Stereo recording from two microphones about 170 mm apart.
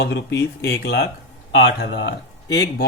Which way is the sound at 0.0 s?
90° left.